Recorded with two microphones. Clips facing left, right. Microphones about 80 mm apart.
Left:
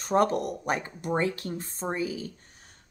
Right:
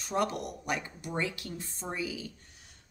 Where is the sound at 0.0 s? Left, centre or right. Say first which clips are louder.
Left 7 dB; left.